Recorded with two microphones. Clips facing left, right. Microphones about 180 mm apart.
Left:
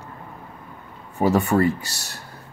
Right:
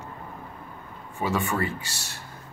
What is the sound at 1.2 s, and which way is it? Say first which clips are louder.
Speech: left 8 dB; 40° left (ahead or behind).